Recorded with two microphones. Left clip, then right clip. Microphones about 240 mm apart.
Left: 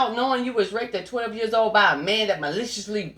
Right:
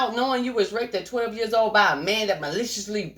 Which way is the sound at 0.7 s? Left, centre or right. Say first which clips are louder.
Right 1 dB; right.